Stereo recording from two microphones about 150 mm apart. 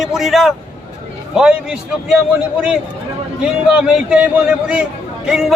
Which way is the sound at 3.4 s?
5° right (ahead or behind).